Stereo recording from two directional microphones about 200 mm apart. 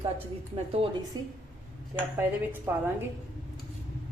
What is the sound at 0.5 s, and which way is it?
A woman's voice, 30° right (ahead or behind).